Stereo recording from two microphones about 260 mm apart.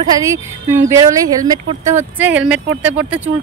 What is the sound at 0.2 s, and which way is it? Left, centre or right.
Speech, centre.